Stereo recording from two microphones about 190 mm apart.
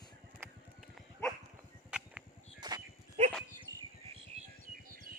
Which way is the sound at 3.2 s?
35° right (ahead or behind).